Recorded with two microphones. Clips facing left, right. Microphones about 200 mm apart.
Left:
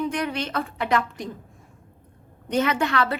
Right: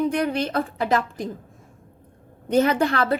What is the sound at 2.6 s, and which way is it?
Speech, 35° right (ahead or behind).